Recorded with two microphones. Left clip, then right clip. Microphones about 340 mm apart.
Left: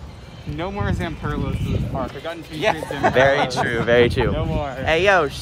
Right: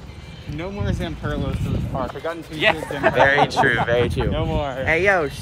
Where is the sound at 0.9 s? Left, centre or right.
Centre.